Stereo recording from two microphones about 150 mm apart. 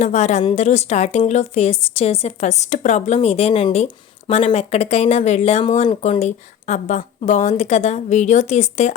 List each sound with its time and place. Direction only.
0.0 s a woman's voice: 50° left (ahead or behind)